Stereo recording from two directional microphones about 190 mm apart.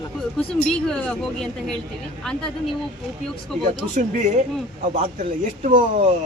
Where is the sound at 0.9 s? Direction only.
5° left (ahead or behind).